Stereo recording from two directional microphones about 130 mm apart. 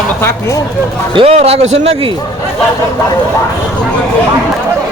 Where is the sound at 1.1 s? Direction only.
50° right (ahead or behind).